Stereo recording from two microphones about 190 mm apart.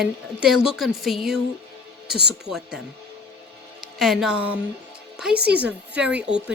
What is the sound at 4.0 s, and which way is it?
A woman's voice, centre (ahead or behind).